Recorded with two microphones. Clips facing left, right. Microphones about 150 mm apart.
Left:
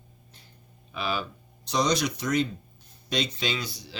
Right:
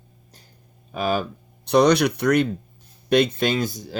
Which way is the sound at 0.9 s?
45° right (ahead or behind).